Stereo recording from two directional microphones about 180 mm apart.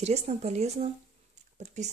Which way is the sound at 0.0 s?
35° right (ahead or behind).